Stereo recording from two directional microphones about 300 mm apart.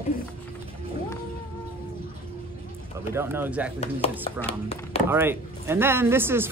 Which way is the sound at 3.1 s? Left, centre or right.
Centre.